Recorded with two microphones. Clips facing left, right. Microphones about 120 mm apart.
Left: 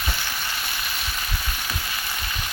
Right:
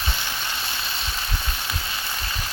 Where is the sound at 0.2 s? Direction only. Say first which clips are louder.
Even; 20° right (ahead or behind).